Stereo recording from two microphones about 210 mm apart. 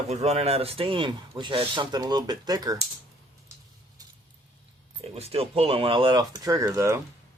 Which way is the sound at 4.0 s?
20° right (ahead or behind).